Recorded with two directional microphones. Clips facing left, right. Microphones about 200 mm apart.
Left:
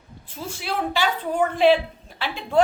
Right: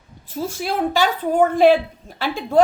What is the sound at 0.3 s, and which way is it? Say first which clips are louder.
A woman's voice: right 5 dB; 40° right (ahead or behind).